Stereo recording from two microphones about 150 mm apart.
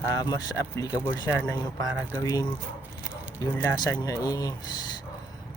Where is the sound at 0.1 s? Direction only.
25° left (ahead or behind).